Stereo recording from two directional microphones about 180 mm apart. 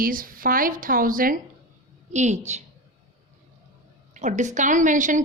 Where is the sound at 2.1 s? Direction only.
40° right (ahead or behind).